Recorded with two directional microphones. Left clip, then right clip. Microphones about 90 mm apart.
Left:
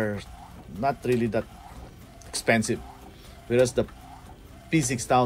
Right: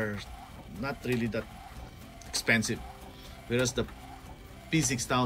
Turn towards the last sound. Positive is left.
turn(degrees=-5)  # may be behind; listen again after turning